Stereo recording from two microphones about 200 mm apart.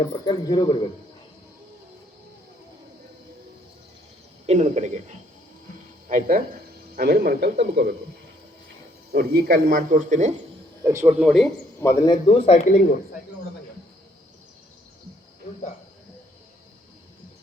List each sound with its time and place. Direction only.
0.0 s speech: 20° left (ahead or behind)
4.4 s speech: 35° right (ahead or behind); by 7.9 s 55° right (ahead or behind)
9.1 s speech: 50° right (ahead or behind)
10.8 s speech: 15° right (ahead or behind)
11.2 s a man's voice: centre (ahead or behind)
11.8 s a man's voice: 15° left (ahead or behind)
12.3 s speech: 30° left (ahead or behind)